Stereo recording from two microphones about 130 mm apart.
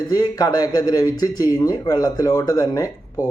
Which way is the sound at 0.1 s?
30° left (ahead or behind).